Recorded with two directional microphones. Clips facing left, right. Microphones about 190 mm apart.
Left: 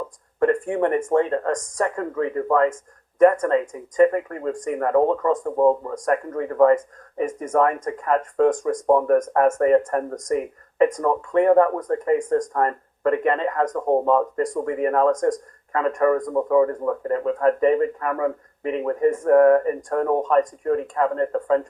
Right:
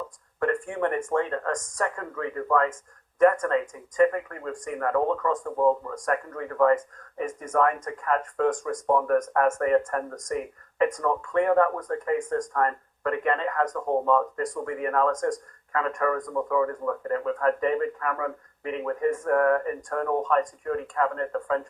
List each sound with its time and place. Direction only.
0.3 s speech: 25° left (ahead or behind)